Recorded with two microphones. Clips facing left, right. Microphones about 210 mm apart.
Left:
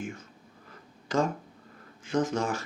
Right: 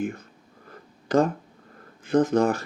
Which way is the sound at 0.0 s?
60° right (ahead or behind).